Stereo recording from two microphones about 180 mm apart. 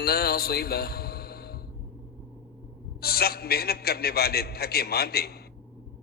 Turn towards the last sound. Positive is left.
turn(degrees=60)  # may be behind; listen again after turning